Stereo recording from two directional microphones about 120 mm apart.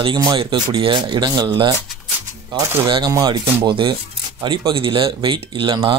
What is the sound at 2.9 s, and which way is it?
Speech, 40° right (ahead or behind).